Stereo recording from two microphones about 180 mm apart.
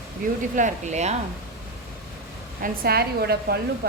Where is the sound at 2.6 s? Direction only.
55° right (ahead or behind).